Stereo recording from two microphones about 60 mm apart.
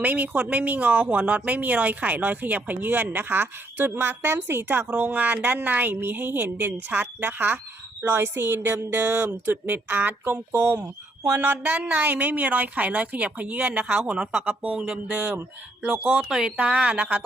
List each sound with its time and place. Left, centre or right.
0.0 s speech: right
11.2 s a sound: right
11.4 s speech: right
14.1 s speech: centre